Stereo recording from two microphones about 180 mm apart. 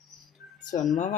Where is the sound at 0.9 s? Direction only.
45° left (ahead or behind).